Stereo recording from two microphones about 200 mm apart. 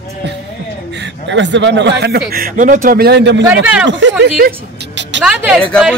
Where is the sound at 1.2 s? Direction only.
65° right (ahead or behind).